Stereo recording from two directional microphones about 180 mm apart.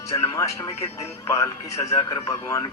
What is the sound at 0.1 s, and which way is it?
Speech, 15° left (ahead or behind).